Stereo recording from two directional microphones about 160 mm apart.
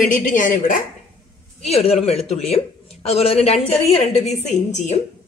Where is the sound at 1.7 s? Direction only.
40° left (ahead or behind).